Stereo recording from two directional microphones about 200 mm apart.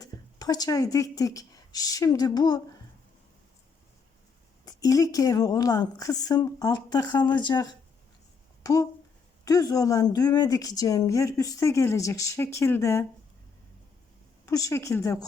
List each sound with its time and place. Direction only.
0.0 s speech: 20° left (ahead or behind)
4.6 s a woman's voice: 15° left (ahead or behind)
14.4 s a woman's voice: 15° left (ahead or behind)